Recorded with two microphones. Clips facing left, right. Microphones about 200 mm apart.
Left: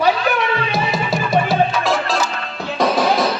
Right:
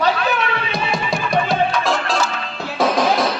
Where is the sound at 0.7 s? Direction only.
5° left (ahead or behind).